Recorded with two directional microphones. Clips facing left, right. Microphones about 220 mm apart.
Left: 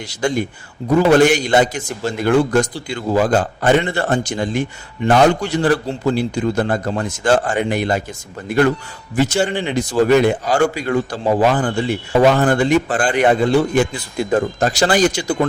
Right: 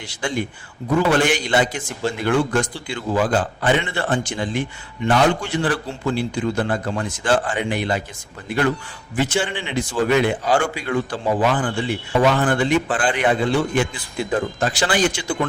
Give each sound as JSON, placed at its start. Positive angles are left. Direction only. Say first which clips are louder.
{"t": 0.1, "sound": "a man's voice", "louder": "left 5 dB", "side_deg": 40}